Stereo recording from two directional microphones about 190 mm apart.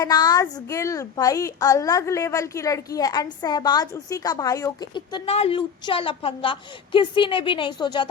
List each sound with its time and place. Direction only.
0.0 s a woman's voice: 20° left (ahead or behind)